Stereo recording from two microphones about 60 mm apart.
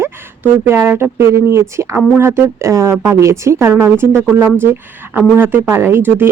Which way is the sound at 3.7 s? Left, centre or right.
Right.